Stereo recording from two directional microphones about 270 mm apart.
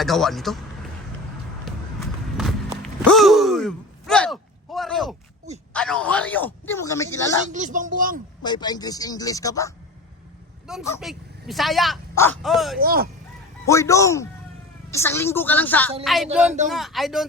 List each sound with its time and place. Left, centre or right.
0.0 s a woman's voice: centre
2.8 s a sound: centre
7.5 s speech: right
8.4 s speech: centre
10.7 s a woman's voice: centre
12.8 s speech: right
13.7 s a woman's voice: centre